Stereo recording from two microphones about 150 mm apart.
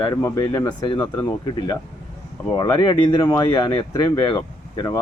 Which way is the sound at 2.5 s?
25° left (ahead or behind).